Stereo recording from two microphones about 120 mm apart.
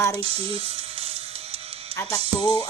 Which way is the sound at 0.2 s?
55° right (ahead or behind).